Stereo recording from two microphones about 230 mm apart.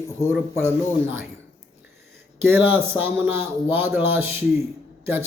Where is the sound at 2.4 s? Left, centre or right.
Centre.